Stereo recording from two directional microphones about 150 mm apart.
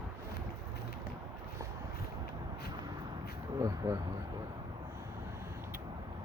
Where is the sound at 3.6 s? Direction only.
20° right (ahead or behind).